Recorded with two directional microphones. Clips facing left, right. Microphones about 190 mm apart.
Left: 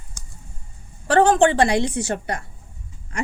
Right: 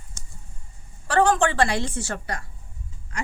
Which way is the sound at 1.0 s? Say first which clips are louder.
Left 5 dB; 25° left (ahead or behind).